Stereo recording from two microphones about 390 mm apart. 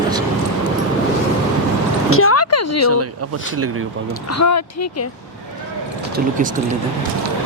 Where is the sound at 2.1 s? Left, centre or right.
Left.